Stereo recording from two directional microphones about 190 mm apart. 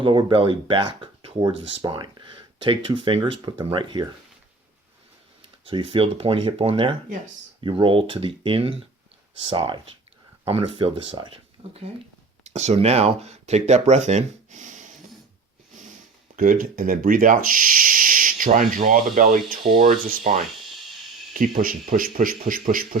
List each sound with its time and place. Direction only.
0.0 s speech: 25° right (ahead or behind)
5.6 s speech: 30° right (ahead or behind)
16.3 s speech: 45° right (ahead or behind)
21.3 s speech: 45° right (ahead or behind)